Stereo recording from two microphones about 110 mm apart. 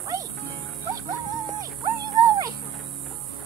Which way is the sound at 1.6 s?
35° right (ahead or behind).